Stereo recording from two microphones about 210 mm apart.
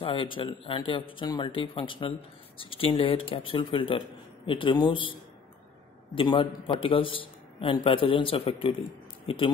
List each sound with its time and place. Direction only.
0.0 s a man's voice: 25° left (ahead or behind)
6.1 s a man's voice: 25° left (ahead or behind)